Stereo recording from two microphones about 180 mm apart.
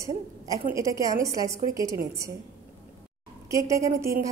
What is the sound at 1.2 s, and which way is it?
Speech, 20° right (ahead or behind).